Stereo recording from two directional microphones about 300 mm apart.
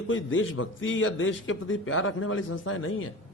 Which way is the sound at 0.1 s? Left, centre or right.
Left.